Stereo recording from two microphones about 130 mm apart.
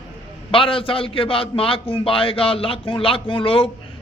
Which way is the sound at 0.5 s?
45° left (ahead or behind).